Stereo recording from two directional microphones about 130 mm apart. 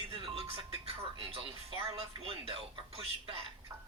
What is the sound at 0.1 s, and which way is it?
Music, 45° right (ahead or behind).